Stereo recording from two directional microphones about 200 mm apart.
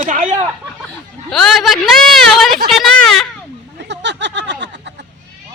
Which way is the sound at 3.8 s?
60° right (ahead or behind).